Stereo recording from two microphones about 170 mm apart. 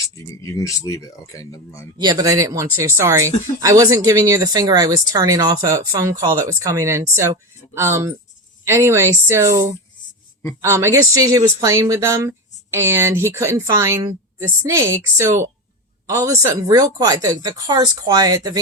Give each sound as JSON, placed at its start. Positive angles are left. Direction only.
{"t": 0.4, "sound": "speech", "side_deg": 20}
{"t": 2.0, "sound": "a woman's voice", "side_deg": -20}